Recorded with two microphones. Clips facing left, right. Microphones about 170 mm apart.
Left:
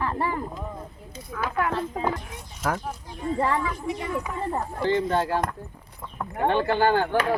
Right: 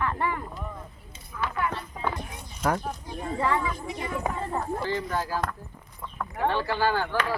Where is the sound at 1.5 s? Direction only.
90° left.